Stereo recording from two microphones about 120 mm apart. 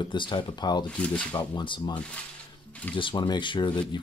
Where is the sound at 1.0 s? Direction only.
10° left (ahead or behind).